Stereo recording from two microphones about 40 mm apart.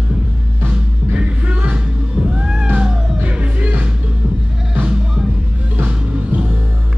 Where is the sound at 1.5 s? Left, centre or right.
Right.